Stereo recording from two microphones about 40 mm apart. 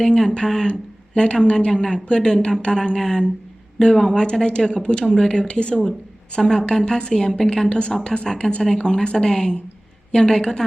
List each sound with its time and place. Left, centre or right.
0.0 s a woman's voice: centre
0.7 s a sound: left
1.5 s speech: left
6.4 s a woman's voice: centre